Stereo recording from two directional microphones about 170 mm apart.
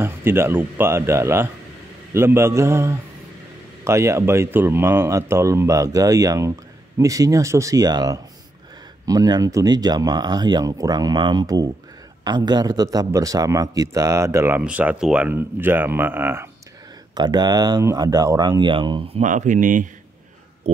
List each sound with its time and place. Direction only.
0.0 s a man's voice: 15° right (ahead or behind)
17.1 s speech: 25° right (ahead or behind)
19.2 s speech: 50° right (ahead or behind)
20.7 s a sound: 35° right (ahead or behind)